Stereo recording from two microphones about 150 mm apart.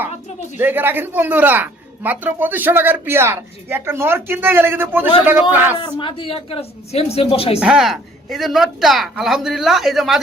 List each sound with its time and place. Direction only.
0.6 s a man's voice: 15° right (ahead or behind)
5.8 s a woman's voice: 35° left (ahead or behind)
7.6 s a woman's voice: 5° right (ahead or behind)